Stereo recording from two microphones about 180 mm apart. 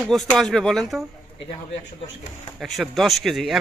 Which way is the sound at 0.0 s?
5° left (ahead or behind).